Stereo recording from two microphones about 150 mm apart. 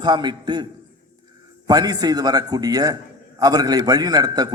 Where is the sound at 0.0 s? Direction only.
30° right (ahead or behind).